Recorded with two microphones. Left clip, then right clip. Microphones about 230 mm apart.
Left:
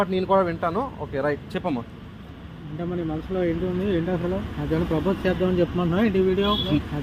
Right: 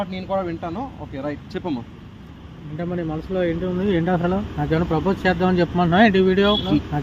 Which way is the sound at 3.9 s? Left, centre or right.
Right.